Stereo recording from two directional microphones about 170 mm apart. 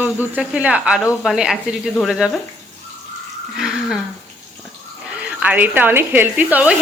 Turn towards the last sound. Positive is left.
turn(degrees=-10)  # may be behind; listen again after turning